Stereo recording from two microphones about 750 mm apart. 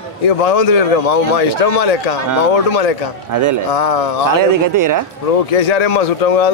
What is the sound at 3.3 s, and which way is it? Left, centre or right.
Speech, right.